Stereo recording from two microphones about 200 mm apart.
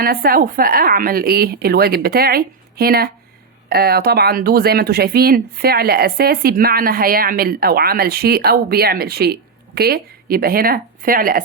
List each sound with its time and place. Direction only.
0.0 s speech: 45° right (ahead or behind)